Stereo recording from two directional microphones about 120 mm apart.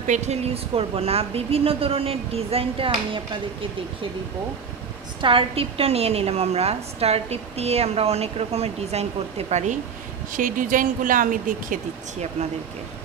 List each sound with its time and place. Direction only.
0.0 s a woman's voice: 80° right; by 3.2 s 50° right (ahead or behind)
5.2 s a woman's voice: 50° right (ahead or behind)
9.5 s speech: 75° right (ahead or behind)
10.3 s speech: 90° right